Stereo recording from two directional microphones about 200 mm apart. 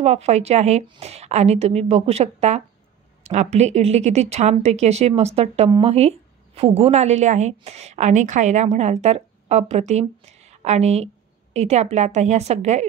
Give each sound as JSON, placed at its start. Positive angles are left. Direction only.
{"t": 0.0, "sound": "speech", "side_deg": -35}